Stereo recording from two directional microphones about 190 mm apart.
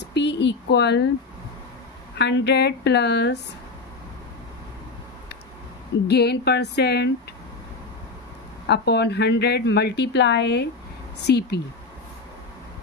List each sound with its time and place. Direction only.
0.0 s speech: 65° left (ahead or behind)
2.1 s a woman's voice: 65° left (ahead or behind)
6.0 s a woman's voice: 60° left (ahead or behind)
8.6 s a woman's voice: 60° left (ahead or behind)